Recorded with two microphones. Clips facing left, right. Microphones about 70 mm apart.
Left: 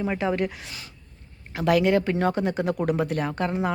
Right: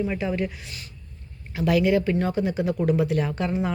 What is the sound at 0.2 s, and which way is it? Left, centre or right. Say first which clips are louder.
Speech: left 2 dB; left.